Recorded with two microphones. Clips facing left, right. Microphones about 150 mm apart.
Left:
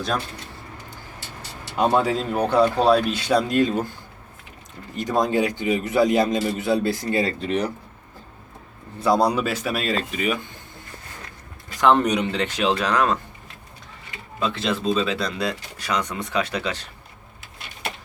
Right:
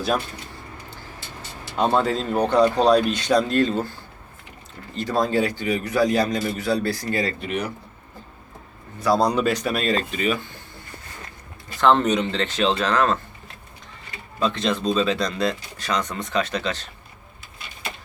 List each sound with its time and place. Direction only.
1.7 s speech: 5° left (ahead or behind)
4.9 s a man's voice: 20° left (ahead or behind)
7.4 s speech: 35° left (ahead or behind)
9.1 s speech: 10° left (ahead or behind)
11.8 s speech: 10° left (ahead or behind)
14.3 s speech: 5° left (ahead or behind)